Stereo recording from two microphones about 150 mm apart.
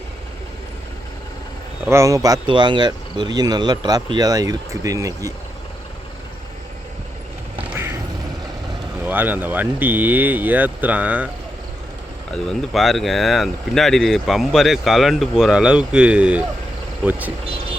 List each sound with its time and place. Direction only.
1.9 s speech: 20° right (ahead or behind)
7.6 s a sound: 10° right (ahead or behind)
9.0 s speech: 10° right (ahead or behind)
12.3 s speech: centre (ahead or behind)